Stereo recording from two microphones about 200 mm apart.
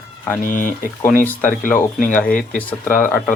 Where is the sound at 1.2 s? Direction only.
10° left (ahead or behind).